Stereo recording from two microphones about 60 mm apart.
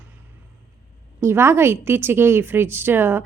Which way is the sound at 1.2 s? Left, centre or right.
Right.